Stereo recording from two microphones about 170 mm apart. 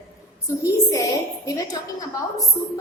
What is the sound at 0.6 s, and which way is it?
A woman's voice, 20° left (ahead or behind).